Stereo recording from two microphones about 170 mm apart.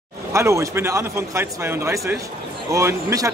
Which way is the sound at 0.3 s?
15° right (ahead or behind).